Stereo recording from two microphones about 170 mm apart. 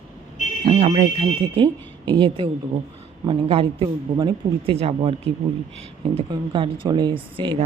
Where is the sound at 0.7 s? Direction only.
45° right (ahead or behind).